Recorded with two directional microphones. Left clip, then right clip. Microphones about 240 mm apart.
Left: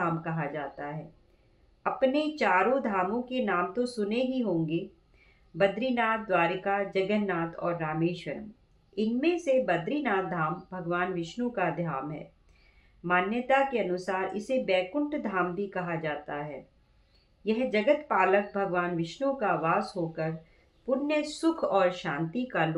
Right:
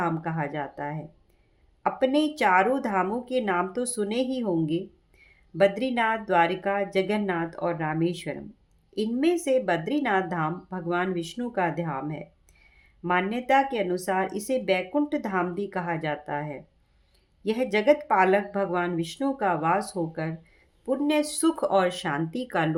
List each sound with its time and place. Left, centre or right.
0.0 s speech: right